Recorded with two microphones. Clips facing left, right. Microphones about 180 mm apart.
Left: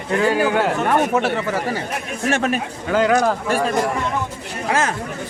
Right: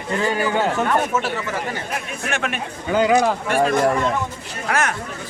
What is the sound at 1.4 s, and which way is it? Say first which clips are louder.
Speech: left 4 dB; 35° left (ahead or behind).